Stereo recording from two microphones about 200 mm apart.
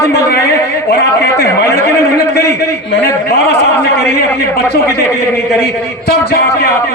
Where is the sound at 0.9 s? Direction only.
50° left (ahead or behind).